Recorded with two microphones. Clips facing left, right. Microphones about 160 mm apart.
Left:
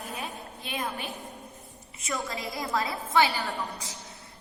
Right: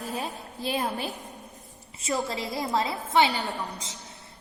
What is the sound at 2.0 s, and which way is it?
A woman's voice, 30° right (ahead or behind).